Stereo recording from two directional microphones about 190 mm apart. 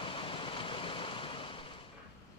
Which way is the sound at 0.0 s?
25° left (ahead or behind).